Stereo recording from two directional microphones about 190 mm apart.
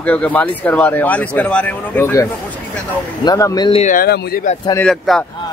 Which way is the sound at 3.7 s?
40° left (ahead or behind).